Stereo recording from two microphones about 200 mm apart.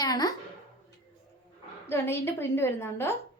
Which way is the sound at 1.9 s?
10° left (ahead or behind).